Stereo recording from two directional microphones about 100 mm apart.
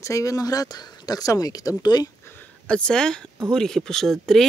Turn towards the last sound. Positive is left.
turn(degrees=5)  # may be behind; listen again after turning